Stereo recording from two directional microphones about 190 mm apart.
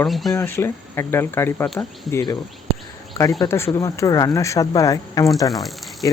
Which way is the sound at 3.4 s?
15° left (ahead or behind).